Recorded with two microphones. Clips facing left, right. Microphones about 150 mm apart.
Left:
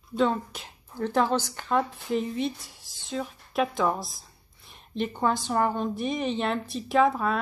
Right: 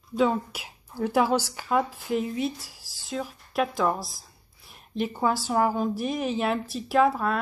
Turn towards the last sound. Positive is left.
turn(degrees=0)  # may be behind; listen again after turning